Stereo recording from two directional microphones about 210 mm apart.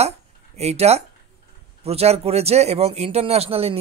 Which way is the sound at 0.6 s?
30° right (ahead or behind).